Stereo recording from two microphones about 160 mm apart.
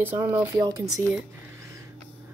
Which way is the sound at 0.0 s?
15° right (ahead or behind).